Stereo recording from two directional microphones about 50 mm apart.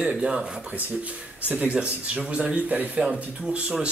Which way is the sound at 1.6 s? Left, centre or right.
Right.